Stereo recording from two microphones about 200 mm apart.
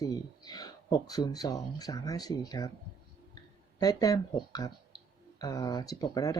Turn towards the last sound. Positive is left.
turn(degrees=15)  # may be behind; listen again after turning